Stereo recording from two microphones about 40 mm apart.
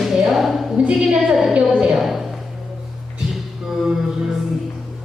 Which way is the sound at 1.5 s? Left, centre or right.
Right.